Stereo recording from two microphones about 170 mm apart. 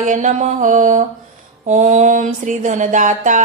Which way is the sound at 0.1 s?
45° right (ahead or behind).